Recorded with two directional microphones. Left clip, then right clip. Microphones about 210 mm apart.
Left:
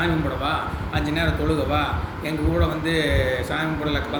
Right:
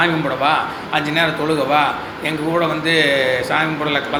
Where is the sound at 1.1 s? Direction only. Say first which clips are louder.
Right 5 dB; 10° left (ahead or behind).